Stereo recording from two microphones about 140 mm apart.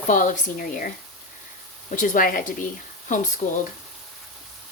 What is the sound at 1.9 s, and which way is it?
Speech, 70° left (ahead or behind).